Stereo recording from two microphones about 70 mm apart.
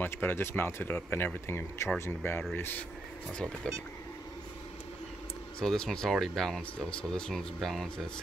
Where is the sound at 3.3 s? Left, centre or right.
Centre.